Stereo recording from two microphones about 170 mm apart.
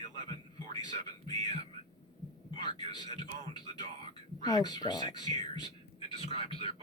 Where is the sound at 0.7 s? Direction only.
25° left (ahead or behind).